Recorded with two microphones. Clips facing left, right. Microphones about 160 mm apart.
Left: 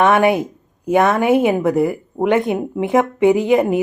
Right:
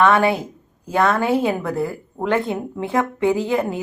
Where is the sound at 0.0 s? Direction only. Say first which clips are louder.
Left 3 dB; 20° left (ahead or behind).